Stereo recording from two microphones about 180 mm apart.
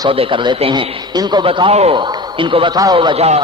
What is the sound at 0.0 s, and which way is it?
Speech, 30° right (ahead or behind).